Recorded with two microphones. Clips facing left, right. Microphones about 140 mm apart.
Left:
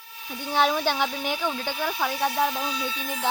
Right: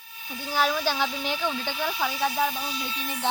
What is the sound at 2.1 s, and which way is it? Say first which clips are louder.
Speech: left 2 dB; 70° left (ahead or behind).